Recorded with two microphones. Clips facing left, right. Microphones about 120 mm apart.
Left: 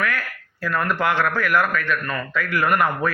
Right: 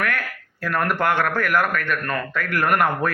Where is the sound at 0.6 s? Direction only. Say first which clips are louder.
Even; 60° right (ahead or behind).